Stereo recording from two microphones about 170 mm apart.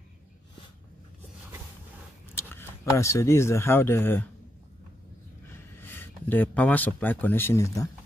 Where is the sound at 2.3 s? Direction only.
15° left (ahead or behind).